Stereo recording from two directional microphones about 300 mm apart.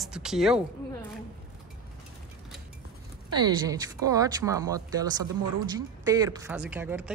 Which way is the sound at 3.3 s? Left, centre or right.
Centre.